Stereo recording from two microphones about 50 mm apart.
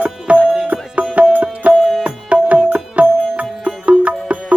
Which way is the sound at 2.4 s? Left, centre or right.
Right.